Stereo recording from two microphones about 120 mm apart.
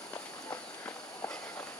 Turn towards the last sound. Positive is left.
turn(degrees=25)  # may be behind; listen again after turning